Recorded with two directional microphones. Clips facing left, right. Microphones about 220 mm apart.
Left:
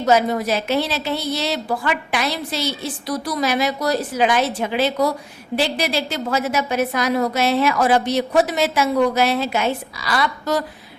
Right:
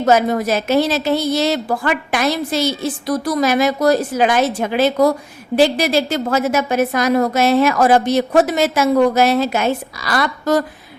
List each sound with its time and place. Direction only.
0.0 s a woman's voice: 50° right (ahead or behind)